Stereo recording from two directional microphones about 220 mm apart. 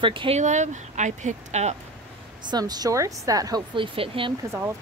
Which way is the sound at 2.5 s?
20° right (ahead or behind).